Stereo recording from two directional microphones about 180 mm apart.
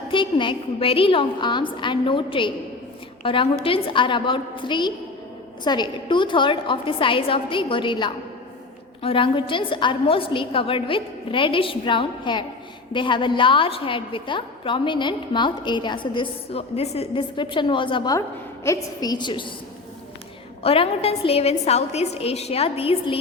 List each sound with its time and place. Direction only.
0.1 s a woman's voice: 25° left (ahead or behind)
20.6 s a woman's voice: 30° left (ahead or behind)